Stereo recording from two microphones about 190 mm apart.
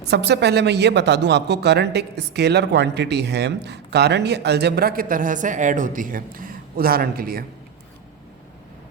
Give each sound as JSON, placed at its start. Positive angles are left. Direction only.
{"t": 0.1, "sound": "speech", "side_deg": -65}